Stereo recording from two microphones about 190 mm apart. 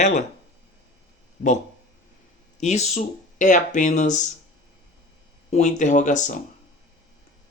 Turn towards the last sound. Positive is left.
turn(degrees=40)  # may be behind; listen again after turning